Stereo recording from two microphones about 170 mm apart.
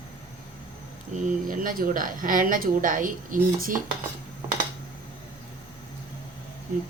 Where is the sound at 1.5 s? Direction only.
55° right (ahead or behind).